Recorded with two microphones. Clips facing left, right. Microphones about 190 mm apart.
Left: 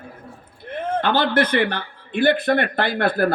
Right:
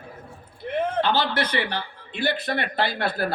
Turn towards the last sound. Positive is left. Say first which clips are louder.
# left 5 dB
turn(degrees=50)  # may be behind; listen again after turning